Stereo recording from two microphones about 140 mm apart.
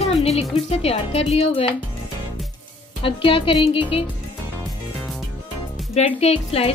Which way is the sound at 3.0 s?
40° left (ahead or behind).